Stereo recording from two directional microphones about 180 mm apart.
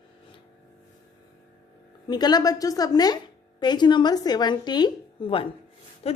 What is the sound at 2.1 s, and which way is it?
A woman's voice, 25° left (ahead or behind).